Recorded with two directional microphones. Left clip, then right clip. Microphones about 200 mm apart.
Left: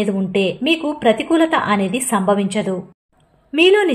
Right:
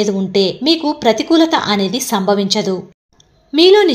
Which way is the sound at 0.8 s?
20° right (ahead or behind).